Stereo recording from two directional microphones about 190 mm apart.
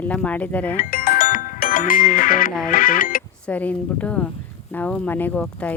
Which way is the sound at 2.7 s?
45° left (ahead or behind).